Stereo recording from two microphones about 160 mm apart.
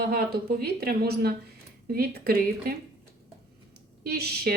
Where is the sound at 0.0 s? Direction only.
75° right (ahead or behind).